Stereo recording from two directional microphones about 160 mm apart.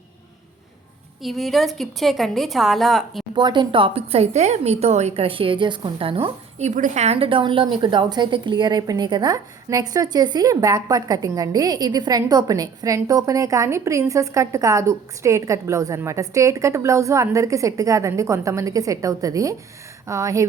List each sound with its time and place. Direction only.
1.2 s a woman's voice: centre (ahead or behind)
3.3 s a woman's voice: 30° right (ahead or behind)